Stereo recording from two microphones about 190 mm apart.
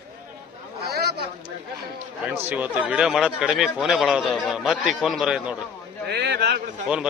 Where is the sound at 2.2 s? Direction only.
10° right (ahead or behind).